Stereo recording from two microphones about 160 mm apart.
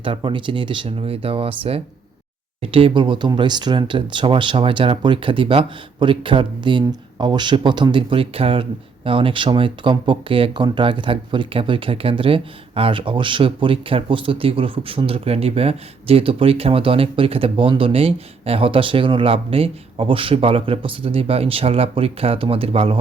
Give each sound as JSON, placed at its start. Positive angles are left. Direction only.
{"t": 0.0, "sound": "speech", "side_deg": -30}